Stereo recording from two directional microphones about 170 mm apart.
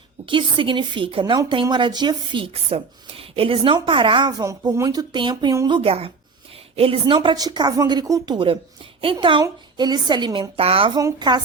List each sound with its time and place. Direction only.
0.3 s a woman's voice: 30° right (ahead or behind)